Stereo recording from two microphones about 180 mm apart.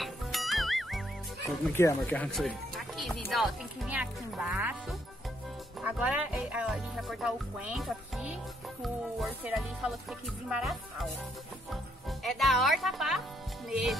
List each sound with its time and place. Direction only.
0.0 s music: centre (ahead or behind)
1.8 s speech: 10° left (ahead or behind); by 4.7 s 10° right (ahead or behind)
5.8 s speech: 5° right (ahead or behind)